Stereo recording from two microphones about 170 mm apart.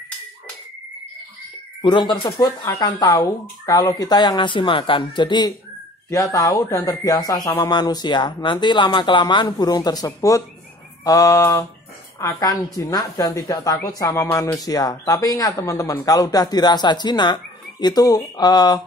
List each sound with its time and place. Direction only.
1.8 s speech: 25° left (ahead or behind)
3.1 s speech: 15° left (ahead or behind)
11.1 s mantra: 20° left (ahead or behind)
12.2 s speech: 20° left (ahead or behind)